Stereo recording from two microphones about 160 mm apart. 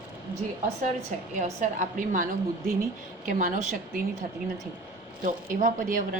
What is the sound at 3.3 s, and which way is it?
Speech, 55° right (ahead or behind).